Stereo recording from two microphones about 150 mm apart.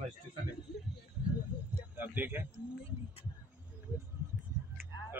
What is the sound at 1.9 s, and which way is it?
Speech, 10° right (ahead or behind).